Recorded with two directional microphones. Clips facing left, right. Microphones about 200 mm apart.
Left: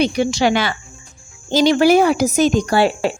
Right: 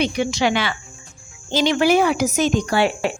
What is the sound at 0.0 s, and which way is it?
A woman's voice, 35° left (ahead or behind).